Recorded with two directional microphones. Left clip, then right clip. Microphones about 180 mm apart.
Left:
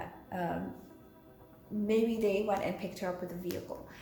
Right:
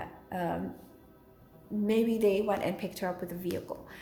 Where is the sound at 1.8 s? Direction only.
50° right (ahead or behind).